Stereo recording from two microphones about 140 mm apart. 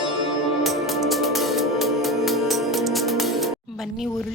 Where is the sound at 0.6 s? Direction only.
Centre (ahead or behind).